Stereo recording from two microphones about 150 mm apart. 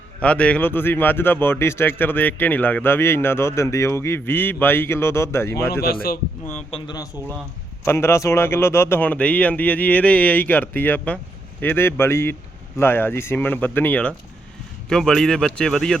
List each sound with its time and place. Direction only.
0.2 s speech: 10° left (ahead or behind)
5.8 s a man's voice: 85° left
6.7 s speech: 40° left (ahead or behind)
7.9 s speech: 15° left (ahead or behind)